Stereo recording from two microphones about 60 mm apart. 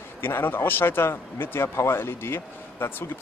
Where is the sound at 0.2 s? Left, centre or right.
Left.